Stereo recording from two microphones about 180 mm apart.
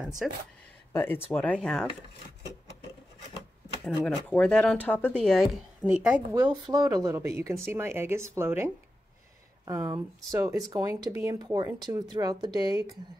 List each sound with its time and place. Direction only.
0.2 s speech: centre (ahead or behind)
0.9 s speech: 10° left (ahead or behind)
3.8 s speech: 5° left (ahead or behind)
6.3 s speech: 20° right (ahead or behind)